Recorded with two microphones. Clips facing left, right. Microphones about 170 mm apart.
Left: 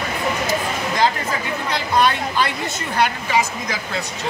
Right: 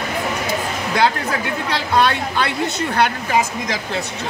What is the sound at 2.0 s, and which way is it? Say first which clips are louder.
A woman's voice: even; 60° right (ahead or behind).